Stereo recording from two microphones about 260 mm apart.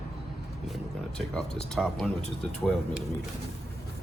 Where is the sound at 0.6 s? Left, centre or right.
Centre.